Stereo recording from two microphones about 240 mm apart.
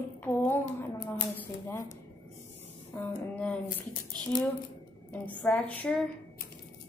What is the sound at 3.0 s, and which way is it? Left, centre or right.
Speech, centre.